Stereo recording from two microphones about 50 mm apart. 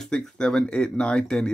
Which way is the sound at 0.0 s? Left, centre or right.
Centre.